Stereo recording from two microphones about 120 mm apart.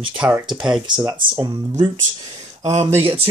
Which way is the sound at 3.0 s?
50° right (ahead or behind).